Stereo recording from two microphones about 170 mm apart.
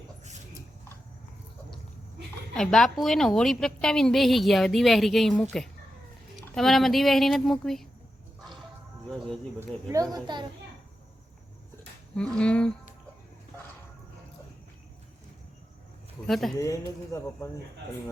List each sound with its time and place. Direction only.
2.6 s a woman's voice: 5° left (ahead or behind)
9.0 s a woman's voice: centre (ahead or behind)
9.9 s a child's voice: 20° right (ahead or behind)
12.1 s a woman's voice: 5° left (ahead or behind)
16.2 s a woman's voice: centre (ahead or behind)
16.6 s speech: 20° left (ahead or behind)